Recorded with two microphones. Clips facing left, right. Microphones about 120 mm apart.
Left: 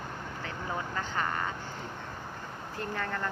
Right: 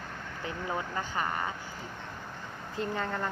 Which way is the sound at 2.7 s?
20° right (ahead or behind).